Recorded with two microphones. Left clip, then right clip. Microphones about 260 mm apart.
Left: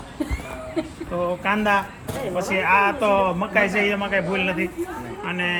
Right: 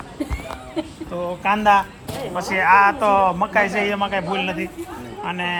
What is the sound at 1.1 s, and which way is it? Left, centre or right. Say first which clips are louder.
Speech: right 1 dB; centre.